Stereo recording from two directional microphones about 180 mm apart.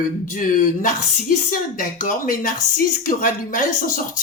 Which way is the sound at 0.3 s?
50° left (ahead or behind).